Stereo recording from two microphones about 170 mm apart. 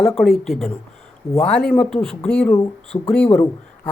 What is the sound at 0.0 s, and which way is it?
Speech, centre (ahead or behind).